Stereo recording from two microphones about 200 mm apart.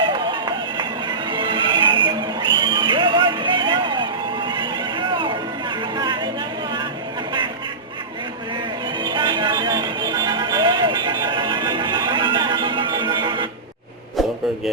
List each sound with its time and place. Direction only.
0.0 s music: 25° right (ahead or behind)
9.0 s music: 25° right (ahead or behind)
14.2 s a sound: centre (ahead or behind)